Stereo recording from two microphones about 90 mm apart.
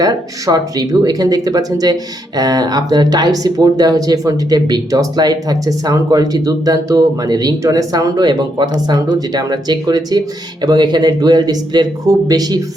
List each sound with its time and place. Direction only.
0.0 s speech: 45° right (ahead or behind)